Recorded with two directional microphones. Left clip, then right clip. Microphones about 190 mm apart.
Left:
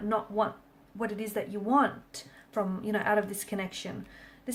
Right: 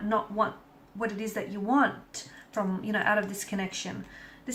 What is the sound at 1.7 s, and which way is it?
Speech, 50° left (ahead or behind).